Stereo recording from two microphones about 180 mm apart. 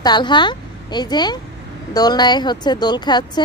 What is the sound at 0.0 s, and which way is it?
A woman's voice, 25° left (ahead or behind).